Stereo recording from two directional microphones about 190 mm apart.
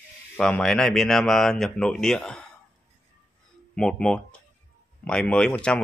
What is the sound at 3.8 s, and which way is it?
Speech, 5° left (ahead or behind).